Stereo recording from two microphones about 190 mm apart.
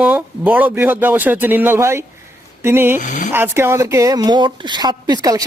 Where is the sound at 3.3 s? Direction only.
10° right (ahead or behind).